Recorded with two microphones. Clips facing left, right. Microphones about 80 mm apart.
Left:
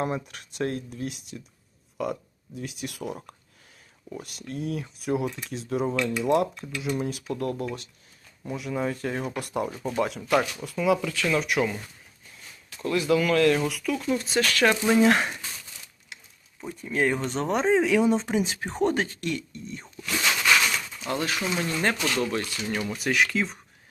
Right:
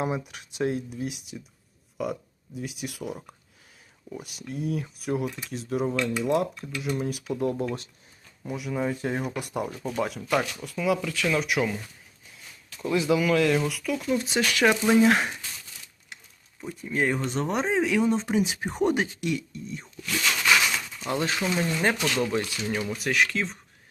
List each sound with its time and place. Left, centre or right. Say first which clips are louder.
0.0 s speech: even; centre
7.4 s speech: right 3 dB; centre
8.4 s speech: even; centre
9.0 s speech: right 1 dB; centre
9.5 s speech: left 2 dB; centre
12.9 s speech: even; centre
14.2 s speech: even; centre
15.0 s speech: even; centre
16.6 s speech: left 1 dB; centre
21.1 s speech: right 1 dB; right
21.6 s speech: right 1 dB; centre